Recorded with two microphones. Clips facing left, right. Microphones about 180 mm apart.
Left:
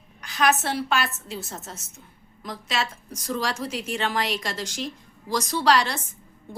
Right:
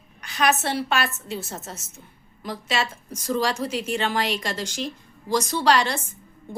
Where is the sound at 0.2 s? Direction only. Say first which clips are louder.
Even; centre (ahead or behind).